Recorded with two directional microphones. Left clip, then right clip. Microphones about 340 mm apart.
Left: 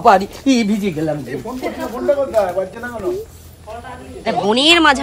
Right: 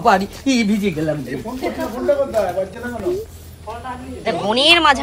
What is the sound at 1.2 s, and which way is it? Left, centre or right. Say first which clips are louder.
Speech: even; centre.